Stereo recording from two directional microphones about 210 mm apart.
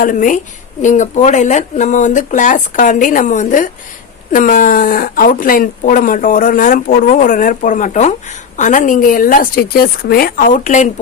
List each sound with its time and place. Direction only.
0.0 s speech: 40° left (ahead or behind)